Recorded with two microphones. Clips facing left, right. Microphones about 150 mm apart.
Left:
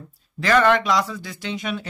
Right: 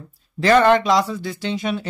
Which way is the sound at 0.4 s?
30° right (ahead or behind).